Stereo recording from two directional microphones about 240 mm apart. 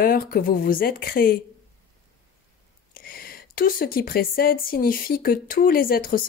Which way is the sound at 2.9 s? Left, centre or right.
Left.